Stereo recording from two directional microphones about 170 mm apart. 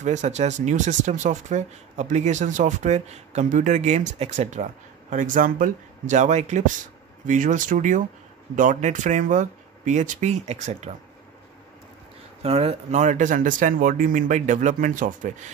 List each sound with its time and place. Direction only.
0.0 s speech: 45° right (ahead or behind)
12.4 s speech: 35° right (ahead or behind)